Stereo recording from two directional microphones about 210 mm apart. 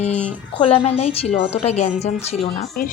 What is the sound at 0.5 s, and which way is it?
A woman's voice, 25° left (ahead or behind).